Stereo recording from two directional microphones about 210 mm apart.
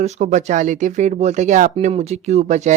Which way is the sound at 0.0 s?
35° right (ahead or behind).